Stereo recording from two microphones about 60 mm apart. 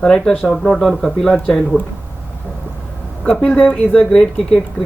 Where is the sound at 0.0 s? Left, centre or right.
Centre.